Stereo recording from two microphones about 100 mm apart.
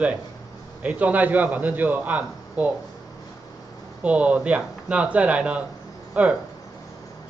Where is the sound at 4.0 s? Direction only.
15° right (ahead or behind).